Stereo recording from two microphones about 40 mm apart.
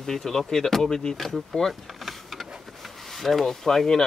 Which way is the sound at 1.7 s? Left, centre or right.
Centre.